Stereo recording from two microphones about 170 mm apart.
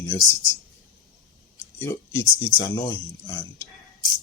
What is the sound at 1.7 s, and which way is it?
Speech, 15° left (ahead or behind).